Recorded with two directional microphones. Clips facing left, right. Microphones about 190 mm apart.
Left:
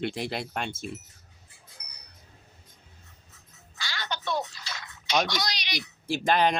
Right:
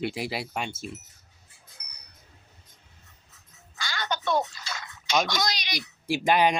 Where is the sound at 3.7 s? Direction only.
50° right (ahead or behind).